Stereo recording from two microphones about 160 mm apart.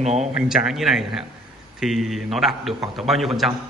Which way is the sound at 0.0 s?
45° right (ahead or behind).